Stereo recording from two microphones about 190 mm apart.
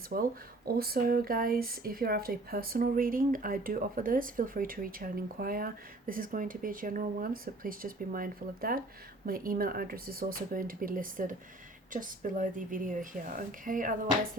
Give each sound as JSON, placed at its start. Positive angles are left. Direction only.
{"t": 0.1, "sound": "speech", "side_deg": -45}